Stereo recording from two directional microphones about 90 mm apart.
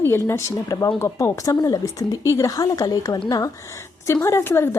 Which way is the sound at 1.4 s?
45° left (ahead or behind).